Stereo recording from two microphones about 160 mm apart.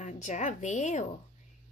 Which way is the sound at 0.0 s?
50° left (ahead or behind).